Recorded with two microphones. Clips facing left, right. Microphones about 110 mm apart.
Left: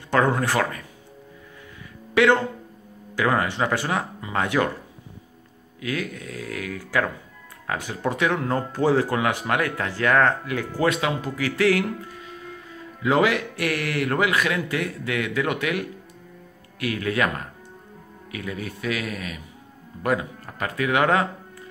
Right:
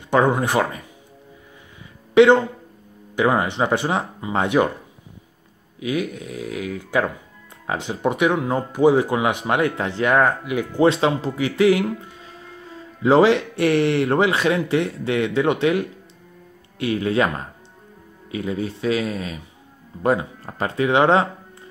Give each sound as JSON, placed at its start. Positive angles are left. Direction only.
{"t": 0.1, "sound": "speech", "side_deg": -20}
{"t": 2.1, "sound": "speech", "side_deg": -20}
{"t": 5.8, "sound": "speech", "side_deg": -20}
{"t": 10.8, "sound": "speech", "side_deg": -30}